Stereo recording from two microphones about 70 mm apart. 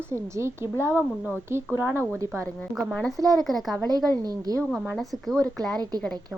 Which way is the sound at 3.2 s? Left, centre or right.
Right.